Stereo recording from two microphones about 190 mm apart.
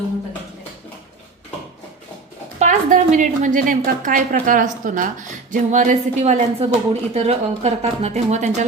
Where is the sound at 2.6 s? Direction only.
40° right (ahead or behind).